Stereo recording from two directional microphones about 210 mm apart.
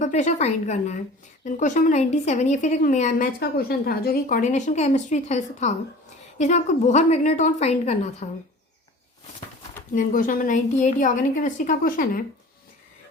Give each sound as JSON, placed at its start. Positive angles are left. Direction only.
{"t": 0.0, "sound": "a woman's voice", "side_deg": 35}
{"t": 9.9, "sound": "a woman's voice", "side_deg": 40}